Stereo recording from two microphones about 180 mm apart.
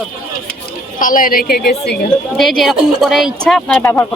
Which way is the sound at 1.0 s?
50° left (ahead or behind).